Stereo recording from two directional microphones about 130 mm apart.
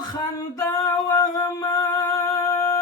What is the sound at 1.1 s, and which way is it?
Music, 25° left (ahead or behind).